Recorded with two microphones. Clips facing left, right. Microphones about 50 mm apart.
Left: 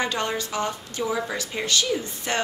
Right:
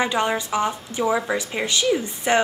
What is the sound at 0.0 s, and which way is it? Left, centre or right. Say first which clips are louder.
A woman's voice: right 4 dB; centre.